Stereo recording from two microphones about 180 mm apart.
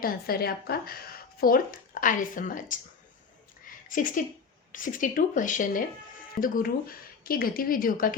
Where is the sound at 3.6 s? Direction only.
50° left (ahead or behind).